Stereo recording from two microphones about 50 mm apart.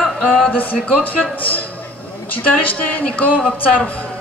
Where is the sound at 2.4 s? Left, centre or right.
Left.